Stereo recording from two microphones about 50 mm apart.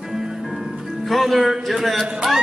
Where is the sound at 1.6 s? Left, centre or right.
Centre.